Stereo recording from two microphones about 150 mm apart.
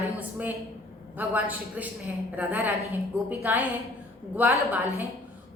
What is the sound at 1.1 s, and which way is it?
A woman's voice, 10° right (ahead or behind).